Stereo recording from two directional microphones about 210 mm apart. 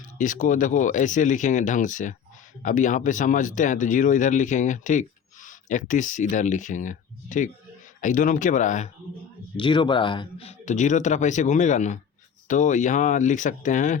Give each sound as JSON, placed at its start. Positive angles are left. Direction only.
{"t": 0.2, "sound": "speech", "side_deg": 40}
{"t": 9.6, "sound": "speech", "side_deg": 20}